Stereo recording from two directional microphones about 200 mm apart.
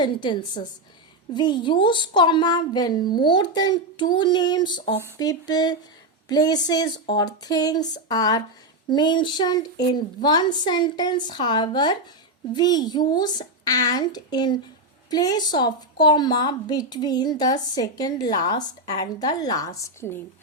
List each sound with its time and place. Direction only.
0.0 s a woman's voice: 25° left (ahead or behind)